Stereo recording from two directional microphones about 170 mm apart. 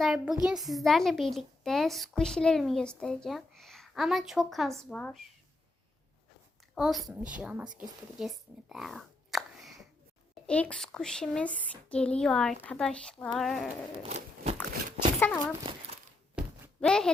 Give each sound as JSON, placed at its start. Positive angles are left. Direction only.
{"t": 0.0, "sound": "a child's voice", "side_deg": 0}
{"t": 6.7, "sound": "a woman's voice", "side_deg": -5}
{"t": 14.1, "sound": "crunch", "side_deg": -50}
{"t": 15.2, "sound": "speech", "side_deg": 10}
{"t": 16.8, "sound": "a child's voice", "side_deg": 5}